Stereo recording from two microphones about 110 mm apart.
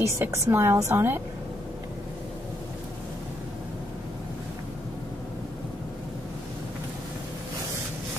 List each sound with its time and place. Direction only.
0.0 s a woman's voice: 25° right (ahead or behind)